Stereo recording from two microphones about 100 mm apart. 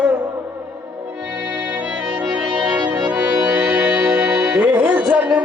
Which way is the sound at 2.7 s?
15° right (ahead or behind).